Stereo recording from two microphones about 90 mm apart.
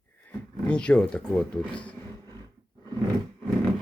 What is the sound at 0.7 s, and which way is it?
Speech, 10° left (ahead or behind).